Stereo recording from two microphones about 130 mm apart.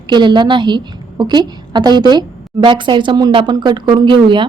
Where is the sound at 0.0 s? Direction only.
35° right (ahead or behind).